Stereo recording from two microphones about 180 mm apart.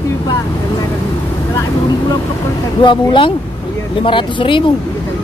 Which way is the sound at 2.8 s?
25° left (ahead or behind).